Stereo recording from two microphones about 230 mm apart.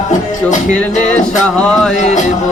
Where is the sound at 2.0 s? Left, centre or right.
Left.